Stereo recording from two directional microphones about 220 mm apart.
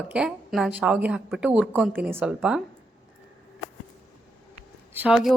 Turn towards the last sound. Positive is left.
turn(degrees=-5)  # may be behind; listen again after turning